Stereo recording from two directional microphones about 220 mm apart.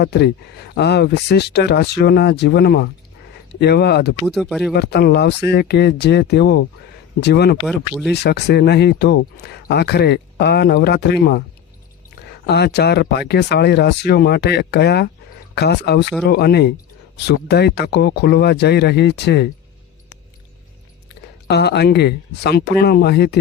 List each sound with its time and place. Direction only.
0.0 s speech: 50° left (ahead or behind)
4.3 s speech: centre (ahead or behind)
4.7 s speech: 50° left (ahead or behind)
7.7 s speech: centre (ahead or behind)
8.1 s speech: 50° left (ahead or behind)
12.5 s speech: 50° left (ahead or behind)
21.2 s speech: 50° left (ahead or behind)